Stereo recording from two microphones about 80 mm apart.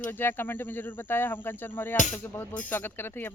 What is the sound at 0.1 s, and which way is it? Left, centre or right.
Speech, left.